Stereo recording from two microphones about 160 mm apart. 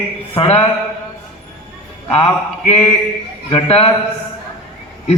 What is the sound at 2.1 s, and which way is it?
A man's voice, 40° left (ahead or behind).